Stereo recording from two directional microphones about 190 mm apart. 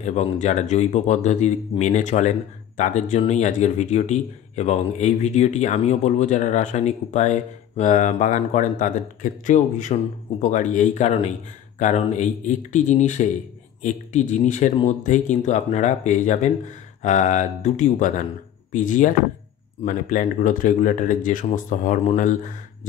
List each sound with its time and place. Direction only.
0.0 s speech: 35° left (ahead or behind)